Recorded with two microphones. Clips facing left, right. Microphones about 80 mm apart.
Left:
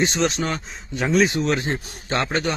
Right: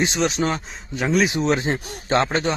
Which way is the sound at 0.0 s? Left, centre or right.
Centre.